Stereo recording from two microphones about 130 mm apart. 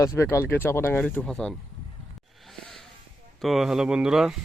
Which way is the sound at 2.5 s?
5° left (ahead or behind).